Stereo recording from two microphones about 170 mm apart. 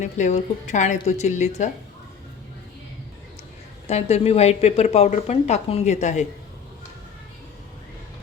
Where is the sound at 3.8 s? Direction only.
40° left (ahead or behind).